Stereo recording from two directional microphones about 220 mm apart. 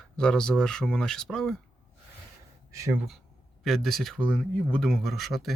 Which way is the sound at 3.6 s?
Centre (ahead or behind).